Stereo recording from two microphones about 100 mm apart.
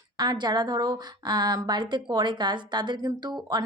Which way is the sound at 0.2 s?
45° right (ahead or behind).